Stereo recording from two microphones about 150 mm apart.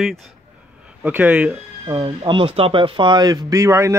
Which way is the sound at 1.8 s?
30° right (ahead or behind).